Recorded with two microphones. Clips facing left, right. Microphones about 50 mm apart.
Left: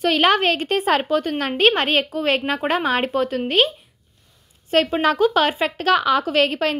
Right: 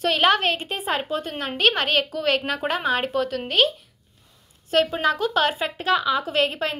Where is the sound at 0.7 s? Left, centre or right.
Left.